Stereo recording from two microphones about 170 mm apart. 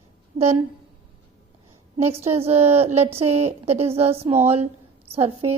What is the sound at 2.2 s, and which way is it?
A woman's voice, 35° right (ahead or behind).